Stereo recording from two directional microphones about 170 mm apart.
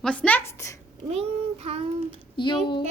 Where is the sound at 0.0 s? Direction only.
10° left (ahead or behind).